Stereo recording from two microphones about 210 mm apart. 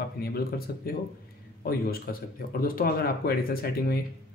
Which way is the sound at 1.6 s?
45° left (ahead or behind).